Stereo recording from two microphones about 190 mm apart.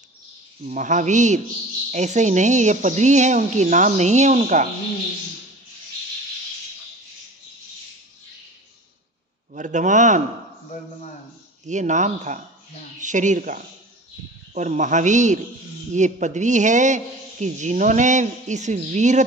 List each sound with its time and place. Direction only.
0.7 s a man's voice: 40° right (ahead or behind)
9.5 s a man's voice: 40° right (ahead or behind)
11.6 s a man's voice: 40° right (ahead or behind)